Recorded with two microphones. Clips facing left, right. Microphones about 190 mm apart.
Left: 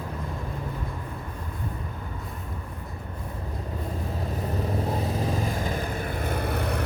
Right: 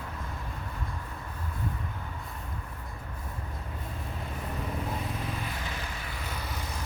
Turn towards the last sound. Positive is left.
turn(degrees=60)  # may be behind; listen again after turning